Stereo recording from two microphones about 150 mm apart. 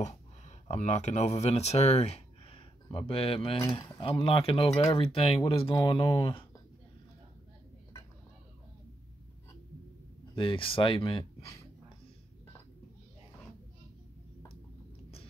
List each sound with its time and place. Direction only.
0.0 s speech: 50° left (ahead or behind)
10.3 s speech: 35° left (ahead or behind)